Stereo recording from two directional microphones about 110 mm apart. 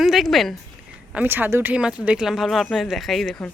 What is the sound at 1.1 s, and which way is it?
Speech, 15° right (ahead or behind).